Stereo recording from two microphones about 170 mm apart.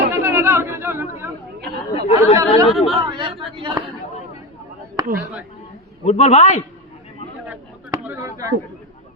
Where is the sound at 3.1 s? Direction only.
30° right (ahead or behind).